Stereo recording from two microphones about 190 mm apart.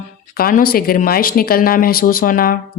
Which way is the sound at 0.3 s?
50° left (ahead or behind).